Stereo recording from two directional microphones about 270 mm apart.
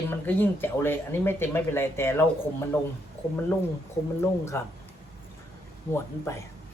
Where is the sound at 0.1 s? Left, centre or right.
Centre.